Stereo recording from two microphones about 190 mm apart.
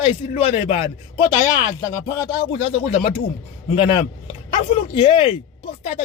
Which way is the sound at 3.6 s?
35° left (ahead or behind).